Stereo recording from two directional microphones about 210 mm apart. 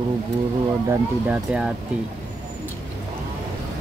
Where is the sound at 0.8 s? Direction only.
5° right (ahead or behind).